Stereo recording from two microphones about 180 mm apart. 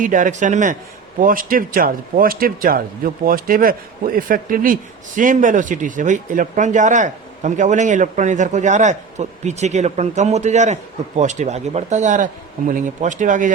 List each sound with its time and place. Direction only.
0.0 s a man's voice: 45° right (ahead or behind)